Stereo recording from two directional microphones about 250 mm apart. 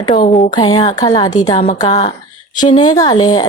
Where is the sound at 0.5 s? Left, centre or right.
Centre.